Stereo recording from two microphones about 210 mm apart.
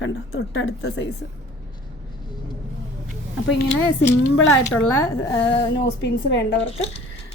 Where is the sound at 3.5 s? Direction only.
55° left (ahead or behind).